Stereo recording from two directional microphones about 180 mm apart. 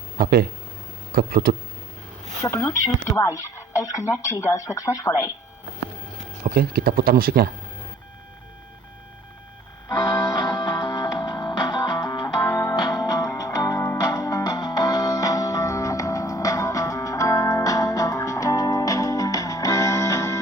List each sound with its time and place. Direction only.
0.2 s speech: 60° right (ahead or behind)
2.4 s speech: 15° left (ahead or behind)
6.4 s speech: 55° right (ahead or behind)
9.9 s music: 20° left (ahead or behind)